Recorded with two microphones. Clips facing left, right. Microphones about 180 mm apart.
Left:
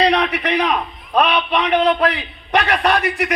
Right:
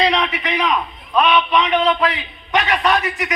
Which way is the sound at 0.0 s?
55° left (ahead or behind).